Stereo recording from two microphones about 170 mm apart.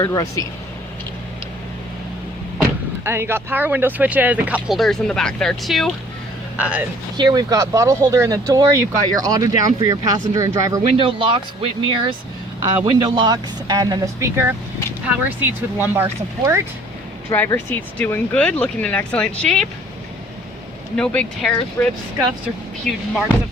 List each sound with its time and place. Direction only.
0.0 s speech: 20° left (ahead or behind)
3.0 s speech: 15° right (ahead or behind)
7.2 s speech: 25° right (ahead or behind)
10.9 s speech: 30° right (ahead or behind)
17.2 s speech: 15° left (ahead or behind)
20.9 s speech: 5° left (ahead or behind)
22.9 s speech: 5° left (ahead or behind)